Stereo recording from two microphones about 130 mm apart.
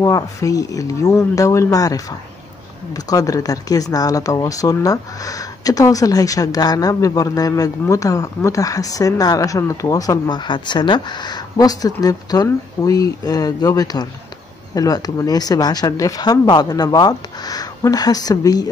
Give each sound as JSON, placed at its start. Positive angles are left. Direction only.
{"t": 0.0, "sound": "a woman's voice", "side_deg": 25}